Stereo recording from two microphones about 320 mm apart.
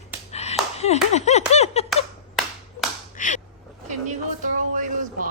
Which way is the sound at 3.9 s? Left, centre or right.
Right.